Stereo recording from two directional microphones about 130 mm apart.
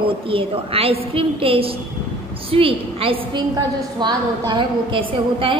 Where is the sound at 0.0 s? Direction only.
45° right (ahead or behind).